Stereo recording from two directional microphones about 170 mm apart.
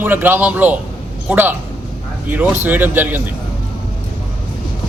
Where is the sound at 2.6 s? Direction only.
10° right (ahead or behind).